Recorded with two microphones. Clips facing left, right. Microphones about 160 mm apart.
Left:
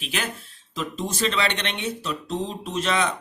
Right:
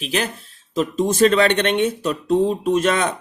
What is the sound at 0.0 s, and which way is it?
Speech, 35° right (ahead or behind).